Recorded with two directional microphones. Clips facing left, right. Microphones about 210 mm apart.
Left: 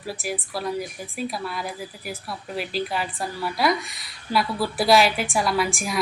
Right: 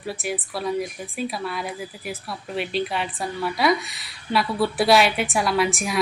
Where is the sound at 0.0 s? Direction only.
Centre (ahead or behind).